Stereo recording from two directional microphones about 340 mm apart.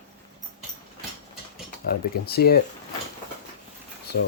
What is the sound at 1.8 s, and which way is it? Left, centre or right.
Speech, left.